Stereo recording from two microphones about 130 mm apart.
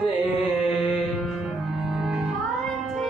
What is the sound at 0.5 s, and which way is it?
Chant, centre (ahead or behind).